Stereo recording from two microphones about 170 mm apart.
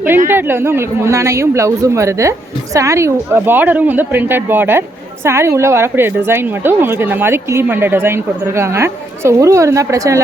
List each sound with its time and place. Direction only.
0.3 s a woman's voice: 15° right (ahead or behind)